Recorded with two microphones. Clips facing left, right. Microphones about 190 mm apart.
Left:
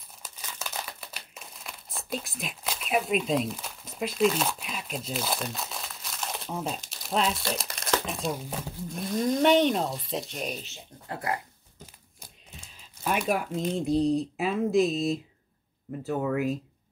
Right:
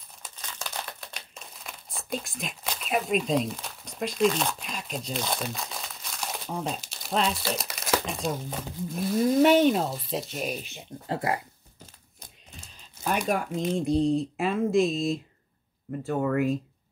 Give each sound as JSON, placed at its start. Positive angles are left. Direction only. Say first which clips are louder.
{"t": 0.4, "sound": "speech", "louder": "even", "side_deg": 5}
{"t": 11.1, "sound": "speech", "louder": "right 4 dB", "side_deg": -25}
{"t": 12.2, "sound": "a sound", "louder": "right 1 dB", "side_deg": 0}
{"t": 13.3, "sound": "speech", "louder": "right 1 dB", "side_deg": 5}